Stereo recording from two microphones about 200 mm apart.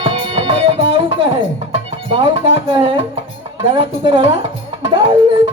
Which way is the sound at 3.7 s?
25° right (ahead or behind).